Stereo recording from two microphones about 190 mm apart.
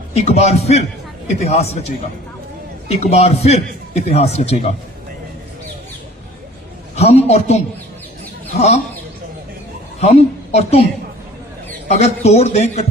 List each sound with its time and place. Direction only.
0.1 s a man's voice: 35° left (ahead or behind)
2.9 s a man's voice: 35° left (ahead or behind)
6.9 s a man's voice: 35° left (ahead or behind)
10.0 s a woman's voice: 35° left (ahead or behind)
11.9 s a man's voice: 35° left (ahead or behind)